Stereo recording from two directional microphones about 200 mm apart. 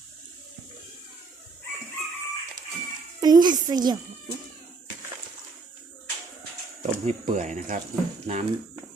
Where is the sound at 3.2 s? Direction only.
20° right (ahead or behind).